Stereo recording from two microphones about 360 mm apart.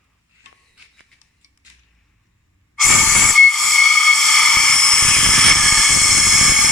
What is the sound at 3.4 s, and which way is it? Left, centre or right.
Steam whistle, centre.